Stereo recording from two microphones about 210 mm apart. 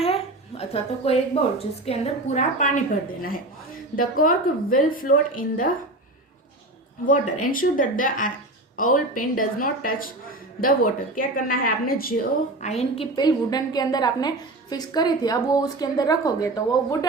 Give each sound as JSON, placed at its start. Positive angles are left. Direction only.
{"t": 0.0, "sound": "a woman's voice", "side_deg": 30}
{"t": 7.1, "sound": "a woman's voice", "side_deg": 40}
{"t": 12.6, "sound": "a woman's voice", "side_deg": 30}